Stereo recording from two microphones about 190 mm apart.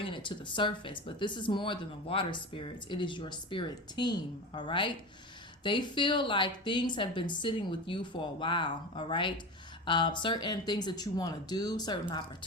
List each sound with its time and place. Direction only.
0.0 s speech: 25° left (ahead or behind)